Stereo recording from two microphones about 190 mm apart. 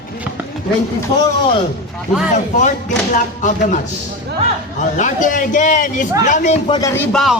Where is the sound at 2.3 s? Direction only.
40° left (ahead or behind).